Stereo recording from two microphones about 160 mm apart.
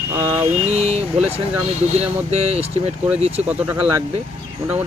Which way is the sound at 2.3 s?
40° right (ahead or behind).